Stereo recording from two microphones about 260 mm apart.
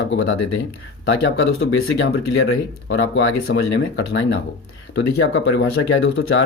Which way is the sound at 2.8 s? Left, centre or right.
Left.